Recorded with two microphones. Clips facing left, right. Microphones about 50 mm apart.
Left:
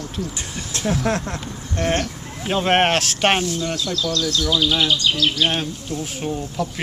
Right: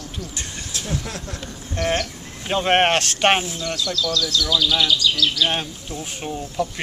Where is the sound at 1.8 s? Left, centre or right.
Centre.